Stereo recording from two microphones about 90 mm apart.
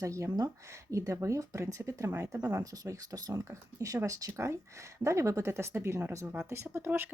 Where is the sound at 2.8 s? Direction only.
40° right (ahead or behind); by 7.1 s 25° right (ahead or behind).